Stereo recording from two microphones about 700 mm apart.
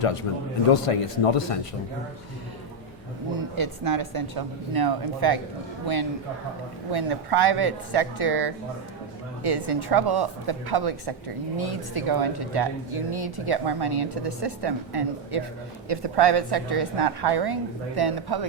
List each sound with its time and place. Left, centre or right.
0.0 s speech: left
3.3 s speech: right
6.9 s speech: right